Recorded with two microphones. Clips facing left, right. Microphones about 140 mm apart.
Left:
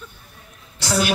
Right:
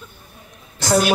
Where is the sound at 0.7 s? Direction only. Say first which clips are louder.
Right 4 dB; 50° right (ahead or behind).